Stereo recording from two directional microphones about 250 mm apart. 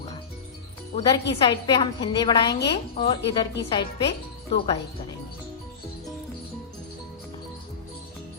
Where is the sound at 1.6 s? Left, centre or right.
Centre.